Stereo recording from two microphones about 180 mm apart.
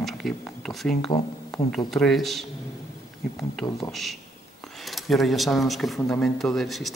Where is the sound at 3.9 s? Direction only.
Centre (ahead or behind).